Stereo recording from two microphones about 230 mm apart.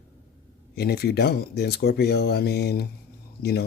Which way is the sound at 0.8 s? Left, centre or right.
Left.